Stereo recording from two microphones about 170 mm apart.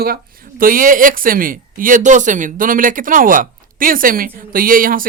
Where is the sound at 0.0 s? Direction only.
60° right (ahead or behind).